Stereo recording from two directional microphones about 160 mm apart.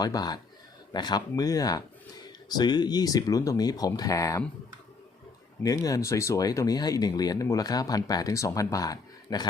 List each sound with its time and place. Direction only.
0.0 s speech: 25° left (ahead or behind)
5.6 s speech: 20° left (ahead or behind)